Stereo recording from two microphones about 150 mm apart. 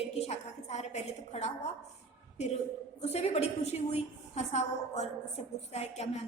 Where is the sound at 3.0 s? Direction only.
45° left (ahead or behind).